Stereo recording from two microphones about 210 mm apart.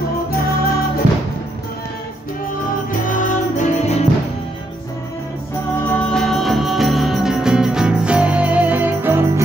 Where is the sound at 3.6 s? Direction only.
30° left (ahead or behind).